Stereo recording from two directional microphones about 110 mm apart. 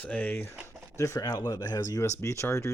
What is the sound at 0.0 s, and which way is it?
Speech, 15° left (ahead or behind).